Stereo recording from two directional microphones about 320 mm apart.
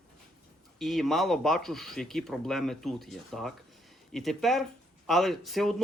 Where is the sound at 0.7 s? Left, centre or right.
Centre.